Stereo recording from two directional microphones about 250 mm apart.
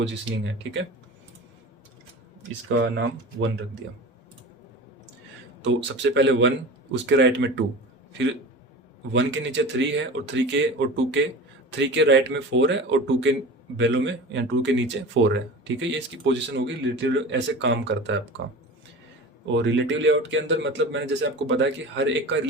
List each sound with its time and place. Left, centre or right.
0.0 s speech: right
2.9 s speech: right
5.6 s speech: right
9.1 s speech: right
19.5 s speech: right